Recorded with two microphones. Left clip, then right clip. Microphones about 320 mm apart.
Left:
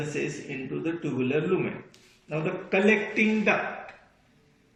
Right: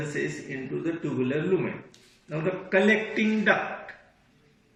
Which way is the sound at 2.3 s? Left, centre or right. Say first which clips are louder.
Right 1 dB; centre.